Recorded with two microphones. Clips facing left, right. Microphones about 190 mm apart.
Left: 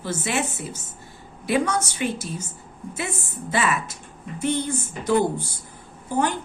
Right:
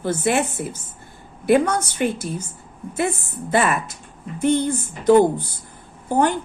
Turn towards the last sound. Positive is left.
turn(degrees=-55)  # may be behind; listen again after turning